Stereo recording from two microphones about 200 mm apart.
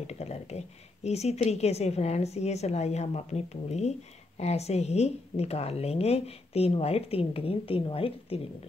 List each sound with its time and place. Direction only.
0.0 s speech: 30° left (ahead or behind)